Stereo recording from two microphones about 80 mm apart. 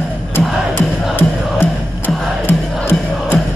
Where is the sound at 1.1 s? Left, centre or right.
Left.